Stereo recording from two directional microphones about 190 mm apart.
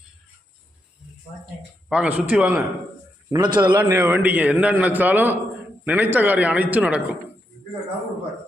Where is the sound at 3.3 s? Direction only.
20° right (ahead or behind); by 7.1 s 5° right (ahead or behind).